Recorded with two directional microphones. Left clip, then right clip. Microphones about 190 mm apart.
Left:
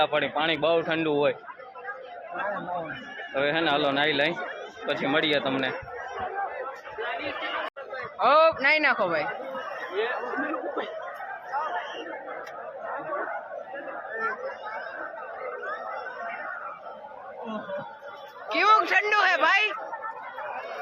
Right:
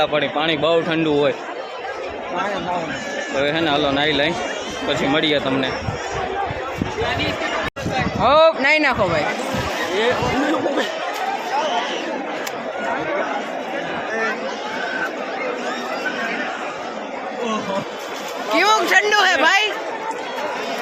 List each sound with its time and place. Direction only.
0.0 s a man's voice: 10° right (ahead or behind)
3.3 s a man's voice: 10° right (ahead or behind)
8.2 s a man's voice: 5° right (ahead or behind)
18.5 s speech: 15° right (ahead or behind)